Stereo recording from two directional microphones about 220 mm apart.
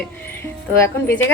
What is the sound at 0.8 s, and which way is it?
Speech, 10° left (ahead or behind).